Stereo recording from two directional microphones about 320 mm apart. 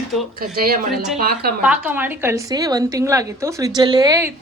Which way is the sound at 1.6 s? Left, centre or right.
Centre.